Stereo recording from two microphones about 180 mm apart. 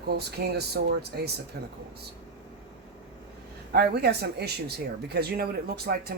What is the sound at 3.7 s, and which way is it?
Speech, 65° right (ahead or behind).